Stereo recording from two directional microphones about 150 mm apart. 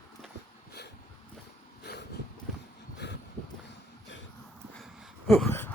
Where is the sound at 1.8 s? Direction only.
90° left.